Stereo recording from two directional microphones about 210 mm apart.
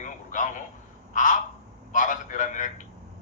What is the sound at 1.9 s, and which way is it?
Speech, 40° left (ahead or behind).